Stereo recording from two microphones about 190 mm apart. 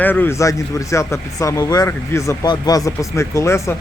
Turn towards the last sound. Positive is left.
turn(degrees=15)  # may be behind; listen again after turning